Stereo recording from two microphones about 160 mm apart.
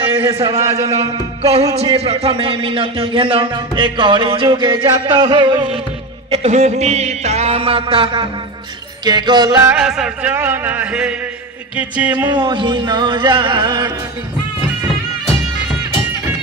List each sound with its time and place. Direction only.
0.6 s music: 15° right (ahead or behind)
1.4 s speech: 40° right (ahead or behind)
6.3 s speech: 40° right (ahead or behind)
9.0 s music: 25° right (ahead or behind)
9.7 s music: 5° right (ahead or behind)
12.4 s music: 30° right (ahead or behind)